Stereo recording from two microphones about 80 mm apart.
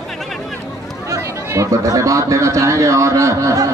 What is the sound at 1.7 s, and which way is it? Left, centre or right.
A man's voice, right.